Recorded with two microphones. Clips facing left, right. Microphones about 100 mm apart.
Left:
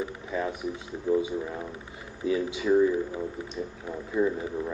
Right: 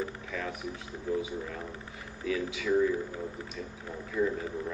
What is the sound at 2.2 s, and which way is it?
Speech, 25° left (ahead or behind).